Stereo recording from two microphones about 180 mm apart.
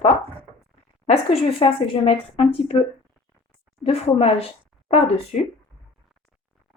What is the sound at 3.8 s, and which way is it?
A woman's voice, 35° left (ahead or behind).